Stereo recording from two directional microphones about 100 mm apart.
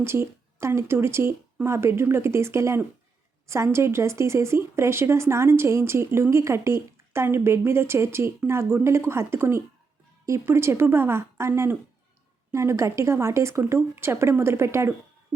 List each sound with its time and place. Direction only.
0.0 s speech: 25° right (ahead or behind)